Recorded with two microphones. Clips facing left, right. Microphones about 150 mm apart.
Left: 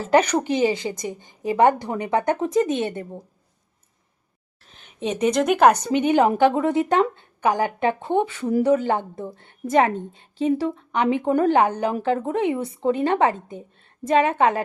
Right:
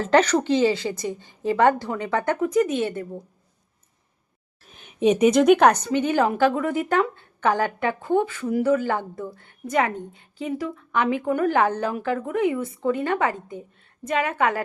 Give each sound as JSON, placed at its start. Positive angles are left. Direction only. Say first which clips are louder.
{"t": 0.0, "sound": "a woman's voice", "louder": "even", "side_deg": 10}
{"t": 4.7, "sound": "a sound", "louder": "right 7 dB", "side_deg": -15}
{"t": 5.3, "sound": "speech", "louder": "left 3 dB", "side_deg": 0}
{"t": 5.8, "sound": "a woman's voice", "louder": "left 3 dB", "side_deg": 20}